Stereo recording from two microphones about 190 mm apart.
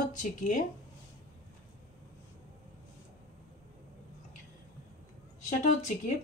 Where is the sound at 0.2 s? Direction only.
40° left (ahead or behind).